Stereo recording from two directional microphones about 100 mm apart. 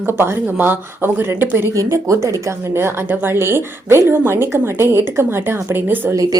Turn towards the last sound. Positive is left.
turn(degrees=-35)  # may be behind; listen again after turning